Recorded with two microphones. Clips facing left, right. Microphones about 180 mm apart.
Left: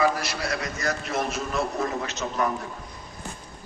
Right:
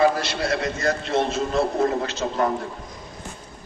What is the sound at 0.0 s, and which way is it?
A man's voice, 30° right (ahead or behind).